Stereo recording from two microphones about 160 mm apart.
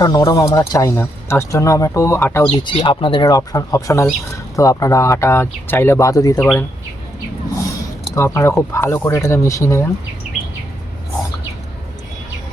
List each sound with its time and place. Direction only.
0.0 s speech: 20° left (ahead or behind)
2.5 s speech: 30° left (ahead or behind)
8.1 s speech: 20° left (ahead or behind)